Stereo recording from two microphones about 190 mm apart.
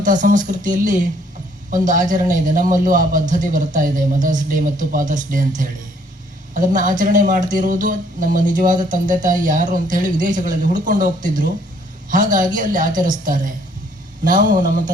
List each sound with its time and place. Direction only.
0.0 s a man's voice: 40° right (ahead or behind)
6.5 s a man's voice: 45° right (ahead or behind)